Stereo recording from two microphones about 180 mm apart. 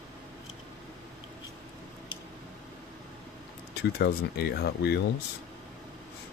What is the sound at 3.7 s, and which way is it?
Speech, 65° left (ahead or behind).